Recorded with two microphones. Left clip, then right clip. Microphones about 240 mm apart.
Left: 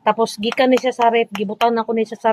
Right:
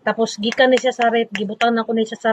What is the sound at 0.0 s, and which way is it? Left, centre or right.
Speech, left.